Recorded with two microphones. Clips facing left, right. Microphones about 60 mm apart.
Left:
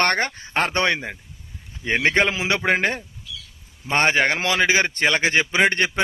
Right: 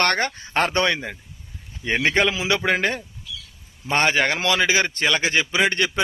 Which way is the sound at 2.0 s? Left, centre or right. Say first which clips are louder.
Even; left.